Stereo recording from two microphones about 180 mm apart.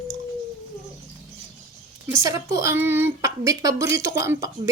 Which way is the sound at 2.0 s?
15° right (ahead or behind).